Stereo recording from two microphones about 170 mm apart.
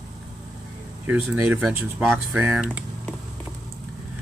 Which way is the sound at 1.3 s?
10° right (ahead or behind).